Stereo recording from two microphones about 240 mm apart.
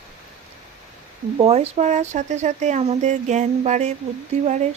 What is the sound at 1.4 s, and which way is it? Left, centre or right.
Speech, right.